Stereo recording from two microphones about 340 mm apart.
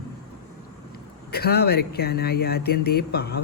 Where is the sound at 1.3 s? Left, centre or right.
Left.